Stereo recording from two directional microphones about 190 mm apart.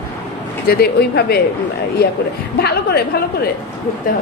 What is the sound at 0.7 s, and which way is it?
Speech, 55° left (ahead or behind).